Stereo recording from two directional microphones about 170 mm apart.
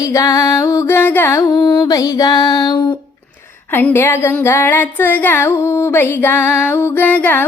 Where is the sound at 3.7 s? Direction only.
10° left (ahead or behind).